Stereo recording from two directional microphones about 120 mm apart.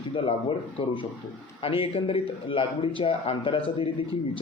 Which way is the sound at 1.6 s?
50° left (ahead or behind).